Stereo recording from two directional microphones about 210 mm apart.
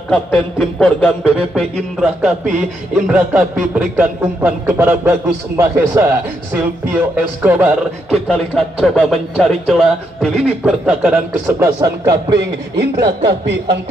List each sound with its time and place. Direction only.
0.1 s a man's voice: 5° left (ahead or behind); by 12.4 s 20° right (ahead or behind)
12.9 s speech: 55° right (ahead or behind)